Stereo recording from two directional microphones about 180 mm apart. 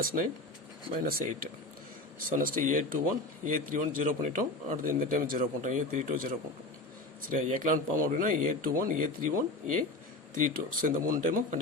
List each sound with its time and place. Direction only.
0.9 s speech: 55° right (ahead or behind)